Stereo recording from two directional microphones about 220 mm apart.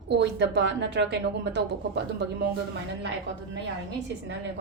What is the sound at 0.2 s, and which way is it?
Speech, 50° right (ahead or behind).